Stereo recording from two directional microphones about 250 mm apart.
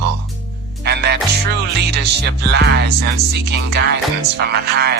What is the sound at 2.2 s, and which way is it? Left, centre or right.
Speech, right.